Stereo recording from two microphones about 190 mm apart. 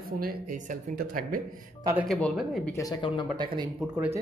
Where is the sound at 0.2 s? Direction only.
50° right (ahead or behind).